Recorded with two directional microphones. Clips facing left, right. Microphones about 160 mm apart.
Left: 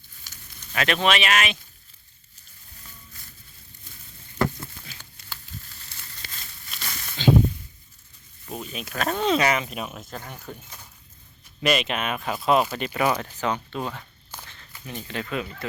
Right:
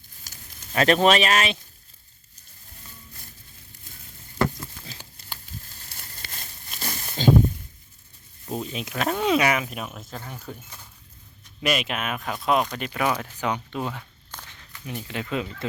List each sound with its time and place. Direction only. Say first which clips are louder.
0.3 s speech: right 2 dB; 35° right (ahead or behind)
4.9 s a sound: right 2 dB; 35° right (ahead or behind)
8.5 s speech: right 2 dB; 25° right (ahead or behind); by 10.6 s centre (ahead or behind)
11.6 s speech: left 2 dB; 5° right (ahead or behind)
13.4 s speech: even; 15° right (ahead or behind)
14.3 s walk: even; 10° left (ahead or behind)
14.8 s speech: right 1 dB; 10° right (ahead or behind)